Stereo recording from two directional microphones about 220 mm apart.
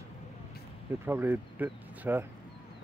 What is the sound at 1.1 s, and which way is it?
Speech, 10° right (ahead or behind).